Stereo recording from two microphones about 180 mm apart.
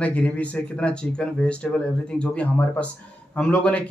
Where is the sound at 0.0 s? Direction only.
5° left (ahead or behind).